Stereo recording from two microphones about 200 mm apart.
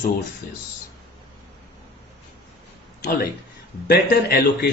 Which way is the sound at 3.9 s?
55° left (ahead or behind).